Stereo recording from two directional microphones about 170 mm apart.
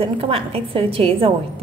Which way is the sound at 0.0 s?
30° right (ahead or behind).